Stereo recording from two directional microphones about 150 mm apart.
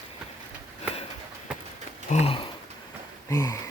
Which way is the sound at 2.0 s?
45° left (ahead or behind).